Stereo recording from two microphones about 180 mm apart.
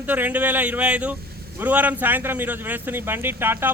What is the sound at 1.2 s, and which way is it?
Vehicle, 60° right (ahead or behind).